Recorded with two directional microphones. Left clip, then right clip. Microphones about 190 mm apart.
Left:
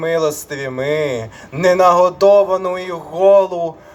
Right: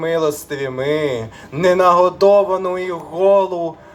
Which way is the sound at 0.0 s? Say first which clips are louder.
Left 1 dB; 30° left (ahead or behind).